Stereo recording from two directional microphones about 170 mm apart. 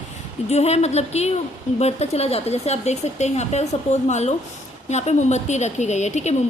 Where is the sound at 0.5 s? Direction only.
40° left (ahead or behind).